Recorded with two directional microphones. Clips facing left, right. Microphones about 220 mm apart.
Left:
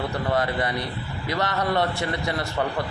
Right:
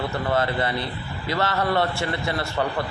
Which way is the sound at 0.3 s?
20° left (ahead or behind).